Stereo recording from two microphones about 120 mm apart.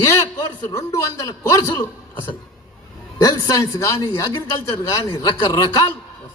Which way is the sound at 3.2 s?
35° left (ahead or behind).